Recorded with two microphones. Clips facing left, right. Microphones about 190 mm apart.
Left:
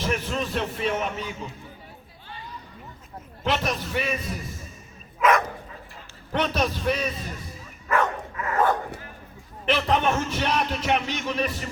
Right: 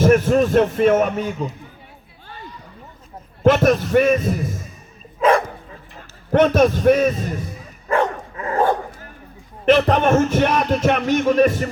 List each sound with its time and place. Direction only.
0.0 s a man's voice: 50° right (ahead or behind)
3.4 s speech: 50° right (ahead or behind)
5.2 s speech: 30° right (ahead or behind)
6.0 s a man's voice: 50° right (ahead or behind)
7.9 s dog: 30° right (ahead or behind)
9.6 s speech: 55° right (ahead or behind)